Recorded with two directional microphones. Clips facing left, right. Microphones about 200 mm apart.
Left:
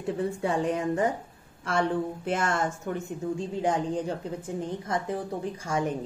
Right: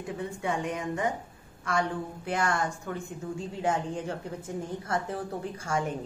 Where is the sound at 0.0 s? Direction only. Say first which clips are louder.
Left 5 dB; 35° left (ahead or behind).